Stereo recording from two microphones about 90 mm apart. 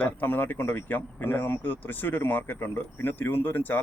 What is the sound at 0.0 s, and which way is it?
Speech, 20° left (ahead or behind).